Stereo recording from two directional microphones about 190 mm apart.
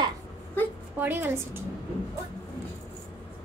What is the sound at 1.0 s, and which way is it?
Speech, 10° right (ahead or behind).